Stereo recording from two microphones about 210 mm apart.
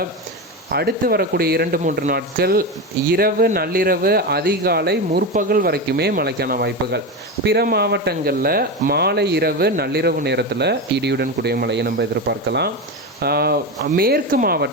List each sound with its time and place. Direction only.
0.7 s speech: 50° right (ahead or behind)